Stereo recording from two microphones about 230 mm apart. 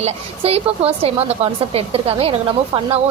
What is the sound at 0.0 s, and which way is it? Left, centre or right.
A woman's voice, right.